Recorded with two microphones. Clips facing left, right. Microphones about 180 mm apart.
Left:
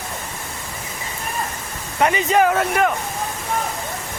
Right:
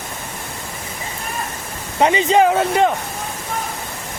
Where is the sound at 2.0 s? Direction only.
25° right (ahead or behind).